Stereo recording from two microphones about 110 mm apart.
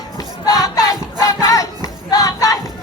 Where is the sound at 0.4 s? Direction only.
35° left (ahead or behind).